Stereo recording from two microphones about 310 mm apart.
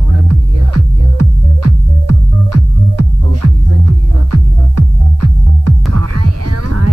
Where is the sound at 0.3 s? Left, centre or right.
Right.